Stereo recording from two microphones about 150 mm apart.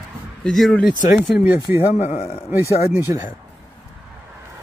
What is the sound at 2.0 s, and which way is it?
Speech, 40° left (ahead or behind).